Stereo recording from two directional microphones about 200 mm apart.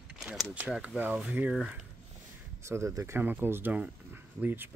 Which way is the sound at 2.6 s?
15° right (ahead or behind).